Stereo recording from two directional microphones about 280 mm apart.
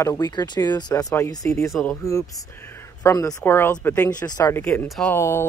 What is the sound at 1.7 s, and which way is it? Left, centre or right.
Speech, centre.